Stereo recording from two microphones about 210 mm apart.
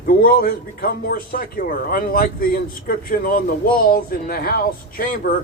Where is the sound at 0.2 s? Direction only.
45° left (ahead or behind).